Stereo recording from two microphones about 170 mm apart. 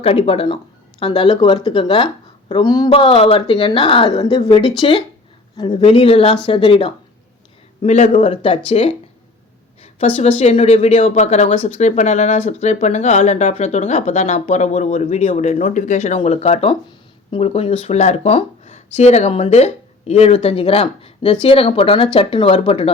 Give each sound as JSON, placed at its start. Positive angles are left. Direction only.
{"t": 0.0, "sound": "speech", "side_deg": 35}
{"t": 2.9, "sound": "a woman's voice", "side_deg": 35}